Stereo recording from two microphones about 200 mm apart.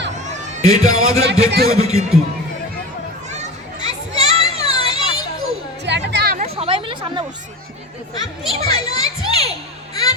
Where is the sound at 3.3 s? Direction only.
35° right (ahead or behind).